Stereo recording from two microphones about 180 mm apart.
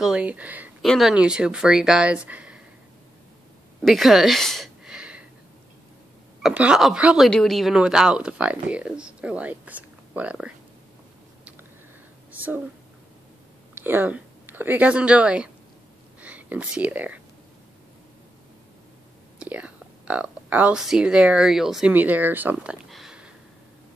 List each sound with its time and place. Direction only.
0.0 s speech: 5° right (ahead or behind)
3.8 s a sound: centre (ahead or behind)
6.4 s speech: 5° right (ahead or behind)
12.3 s a sound: 10° right (ahead or behind)
13.7 s speech: 10° right (ahead or behind)
19.4 s speech: 5° right (ahead or behind)